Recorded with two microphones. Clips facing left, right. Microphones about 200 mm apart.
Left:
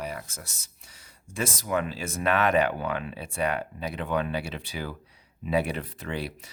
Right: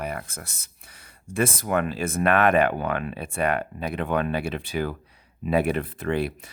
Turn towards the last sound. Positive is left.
turn(degrees=-55)  # may be behind; listen again after turning